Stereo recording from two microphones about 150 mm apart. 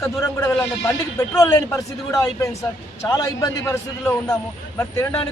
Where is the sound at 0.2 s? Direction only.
20° left (ahead or behind).